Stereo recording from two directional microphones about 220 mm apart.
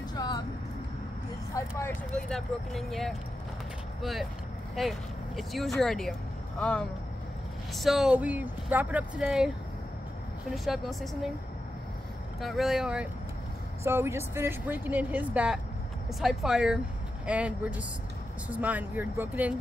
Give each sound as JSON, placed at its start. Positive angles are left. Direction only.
{"t": 0.1, "sound": "music", "side_deg": 20}
{"t": 1.8, "sound": "speech", "side_deg": 5}
{"t": 10.5, "sound": "speech", "side_deg": 0}
{"t": 12.4, "sound": "speech", "side_deg": 0}